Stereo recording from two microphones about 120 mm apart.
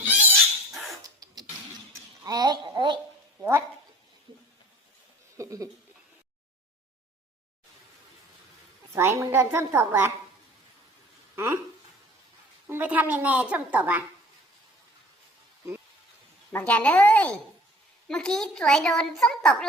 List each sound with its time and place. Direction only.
0.3 s dog: centre (ahead or behind)
1.0 s a sound: 30° right (ahead or behind)
5.4 s a sound: 30° right (ahead or behind)
8.9 s a woman's voice: 25° right (ahead or behind)
11.3 s speech: 20° right (ahead or behind)
12.6 s a woman's voice: 15° right (ahead or behind)
16.5 s a child's voice: 15° left (ahead or behind)